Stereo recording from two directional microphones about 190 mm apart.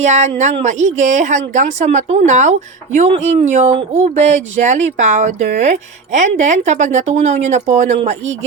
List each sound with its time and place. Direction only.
0.0 s speech: 35° right (ahead or behind)